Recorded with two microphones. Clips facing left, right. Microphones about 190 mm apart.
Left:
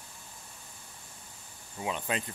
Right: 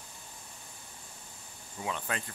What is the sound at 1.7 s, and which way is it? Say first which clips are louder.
Speech: left 3 dB; 20° left (ahead or behind).